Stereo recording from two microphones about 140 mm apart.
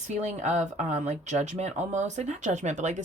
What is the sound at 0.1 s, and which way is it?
Speech, 55° right (ahead or behind).